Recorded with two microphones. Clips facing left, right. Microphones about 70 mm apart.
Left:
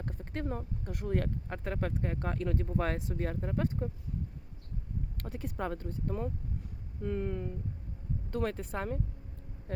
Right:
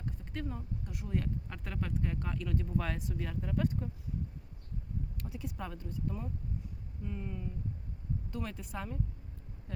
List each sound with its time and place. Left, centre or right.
0.0 s speech: left
1.5 s speech: left
5.1 s speech: left